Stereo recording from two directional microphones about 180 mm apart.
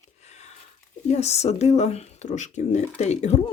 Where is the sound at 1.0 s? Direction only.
35° left (ahead or behind).